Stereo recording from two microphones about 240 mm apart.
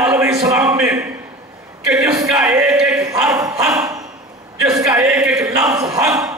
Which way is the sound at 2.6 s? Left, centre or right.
Centre.